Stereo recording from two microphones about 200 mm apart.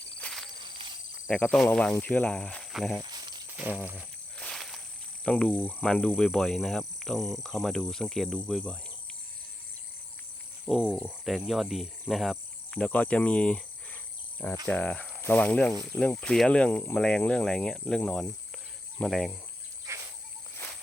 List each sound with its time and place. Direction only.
0.2 s a sound: 5° left (ahead or behind)
0.6 s cricket: 25° right (ahead or behind)
1.3 s speech: 5° left (ahead or behind)
3.0 s snake: 20° right (ahead or behind)
3.5 s a sound: 10° right (ahead or behind)
4.4 s walk: centre (ahead or behind)
5.2 s speech: 5° left (ahead or behind)
10.7 s speech: 5° left (ahead or behind)